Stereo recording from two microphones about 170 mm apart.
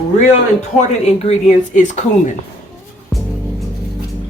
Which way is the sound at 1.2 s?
40° left (ahead or behind).